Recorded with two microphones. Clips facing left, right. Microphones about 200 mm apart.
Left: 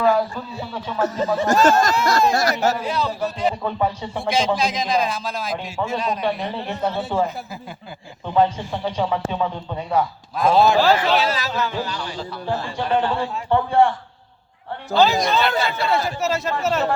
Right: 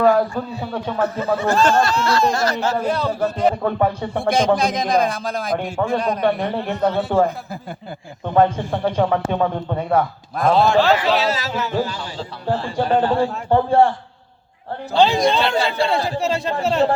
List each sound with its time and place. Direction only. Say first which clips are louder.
0.0 s speech: right 3 dB; 50° right (ahead or behind)
1.5 s speech: even; 45° left (ahead or behind)
2.7 s a man's voice: right 4 dB; 55° right (ahead or behind)
10.5 s a man's voice: right 1 dB; 5° left (ahead or behind)
10.9 s speech: right 1 dB; 25° right (ahead or behind)
14.9 s speech: right 2 dB; 30° right (ahead or behind)